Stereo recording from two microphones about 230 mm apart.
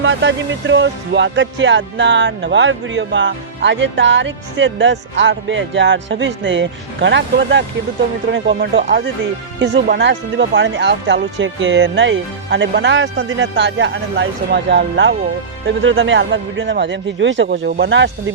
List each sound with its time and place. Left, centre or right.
0.0 s speech: right